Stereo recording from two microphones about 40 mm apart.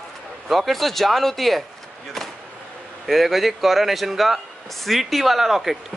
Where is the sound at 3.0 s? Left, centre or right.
Centre.